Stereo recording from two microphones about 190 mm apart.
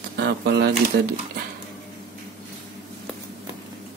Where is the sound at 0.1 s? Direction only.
60° right (ahead or behind).